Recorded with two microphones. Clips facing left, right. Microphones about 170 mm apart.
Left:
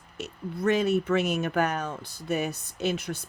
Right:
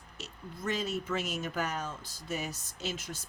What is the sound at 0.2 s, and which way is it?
Speech, 65° left (ahead or behind).